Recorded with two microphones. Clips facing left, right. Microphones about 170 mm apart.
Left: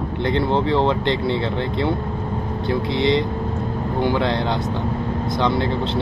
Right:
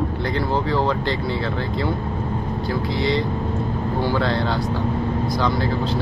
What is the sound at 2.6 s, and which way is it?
Speech, 25° left (ahead or behind).